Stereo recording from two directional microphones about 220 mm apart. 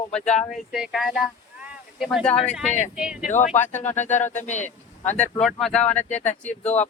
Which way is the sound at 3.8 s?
10° left (ahead or behind).